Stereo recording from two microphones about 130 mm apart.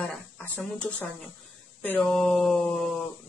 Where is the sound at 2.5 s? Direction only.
5° left (ahead or behind).